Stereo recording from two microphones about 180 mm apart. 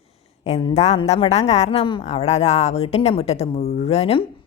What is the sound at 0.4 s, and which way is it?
A woman's voice, 35° left (ahead or behind).